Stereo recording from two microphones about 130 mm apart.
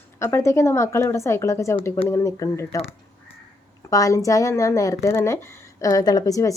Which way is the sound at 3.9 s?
25° left (ahead or behind).